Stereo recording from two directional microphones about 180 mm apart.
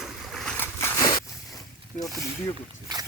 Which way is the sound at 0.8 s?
20° left (ahead or behind).